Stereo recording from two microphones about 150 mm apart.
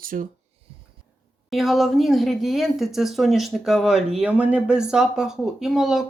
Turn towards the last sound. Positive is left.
turn(degrees=0)  # may be behind; listen again after turning